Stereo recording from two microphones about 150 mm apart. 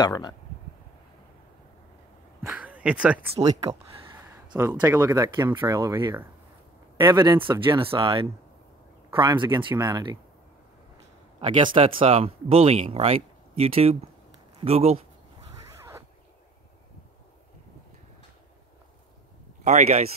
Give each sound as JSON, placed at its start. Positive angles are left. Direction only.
{"t": 0.0, "sound": "speech", "side_deg": 25}
{"t": 2.4, "sound": "speech", "side_deg": -10}
{"t": 3.6, "sound": "a sound", "side_deg": -40}
{"t": 4.6, "sound": "speech", "side_deg": -20}
{"t": 11.4, "sound": "speech", "side_deg": -35}
{"t": 19.6, "sound": "speech", "side_deg": -50}